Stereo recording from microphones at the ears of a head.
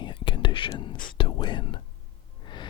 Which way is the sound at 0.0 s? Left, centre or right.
Left.